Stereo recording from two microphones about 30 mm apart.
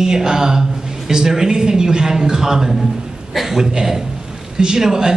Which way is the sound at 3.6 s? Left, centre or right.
Centre.